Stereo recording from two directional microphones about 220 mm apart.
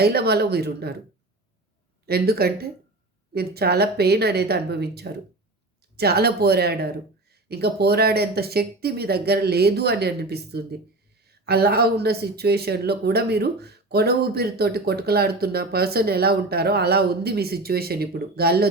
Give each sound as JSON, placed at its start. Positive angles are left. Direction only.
{"t": 0.0, "sound": "speech", "side_deg": -45}
{"t": 2.0, "sound": "speech", "side_deg": -45}